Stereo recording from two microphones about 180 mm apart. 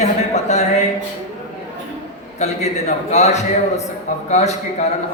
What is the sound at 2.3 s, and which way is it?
A man's voice, 40° left (ahead or behind).